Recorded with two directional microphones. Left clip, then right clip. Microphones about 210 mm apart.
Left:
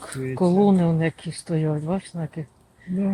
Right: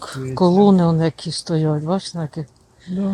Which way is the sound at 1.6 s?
15° right (ahead or behind).